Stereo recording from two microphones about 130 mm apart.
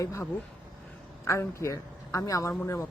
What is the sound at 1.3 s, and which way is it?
Speech, 20° left (ahead or behind).